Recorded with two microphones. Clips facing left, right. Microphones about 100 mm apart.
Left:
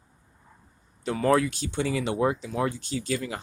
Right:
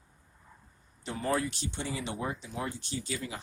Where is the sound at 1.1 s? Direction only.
85° left.